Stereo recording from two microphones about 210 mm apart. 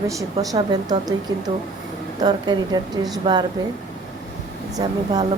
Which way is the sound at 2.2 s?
20° right (ahead or behind).